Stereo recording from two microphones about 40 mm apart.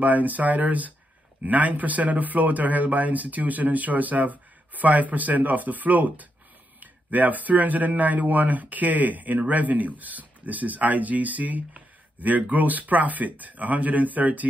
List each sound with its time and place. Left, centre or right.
0.0 s speech: right